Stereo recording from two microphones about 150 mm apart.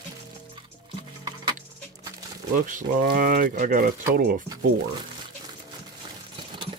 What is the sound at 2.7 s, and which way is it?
Speech, 70° right (ahead or behind).